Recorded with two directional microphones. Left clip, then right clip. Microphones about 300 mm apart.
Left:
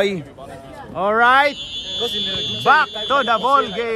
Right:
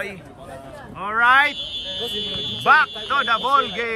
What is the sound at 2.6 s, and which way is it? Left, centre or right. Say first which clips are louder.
Speech: left 1 dB; centre.